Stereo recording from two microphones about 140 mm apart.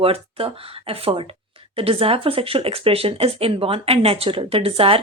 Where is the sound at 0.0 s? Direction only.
45° right (ahead or behind).